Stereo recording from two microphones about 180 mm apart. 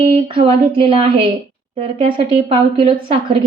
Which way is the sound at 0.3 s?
30° right (ahead or behind).